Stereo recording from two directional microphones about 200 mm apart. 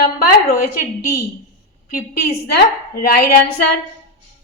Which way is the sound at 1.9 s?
50° left (ahead or behind).